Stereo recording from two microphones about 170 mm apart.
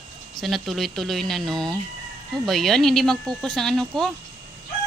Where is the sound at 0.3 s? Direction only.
Centre (ahead or behind).